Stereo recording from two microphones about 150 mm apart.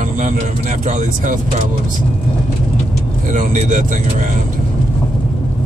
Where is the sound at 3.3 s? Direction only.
60° right (ahead or behind).